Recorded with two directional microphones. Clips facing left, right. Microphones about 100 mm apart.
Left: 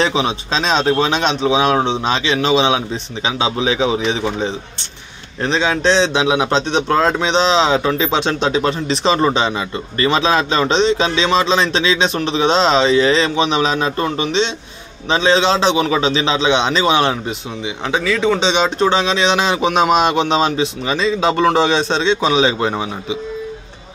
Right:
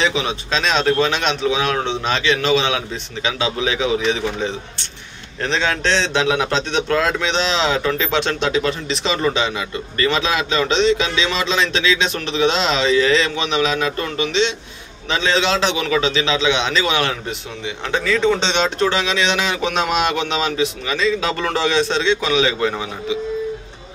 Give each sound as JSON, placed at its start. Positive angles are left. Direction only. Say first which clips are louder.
{"t": 0.0, "sound": "a man's voice", "louder": "left 3 dB", "side_deg": 35}
{"t": 17.8, "sound": "a man's voice", "louder": "left 1 dB", "side_deg": 10}